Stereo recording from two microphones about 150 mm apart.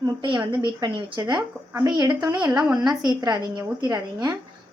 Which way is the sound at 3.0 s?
30° right (ahead or behind).